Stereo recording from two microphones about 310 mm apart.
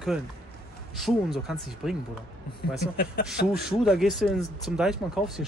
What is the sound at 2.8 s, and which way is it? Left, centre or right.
Speech, left.